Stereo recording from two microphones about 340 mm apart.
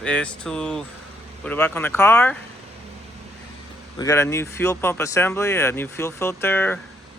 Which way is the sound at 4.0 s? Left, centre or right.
Centre.